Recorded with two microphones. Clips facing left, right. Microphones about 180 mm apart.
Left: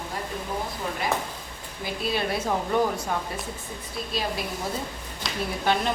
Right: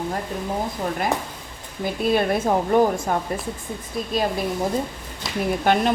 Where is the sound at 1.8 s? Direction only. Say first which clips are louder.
Right 7 dB; 50° right (ahead or behind).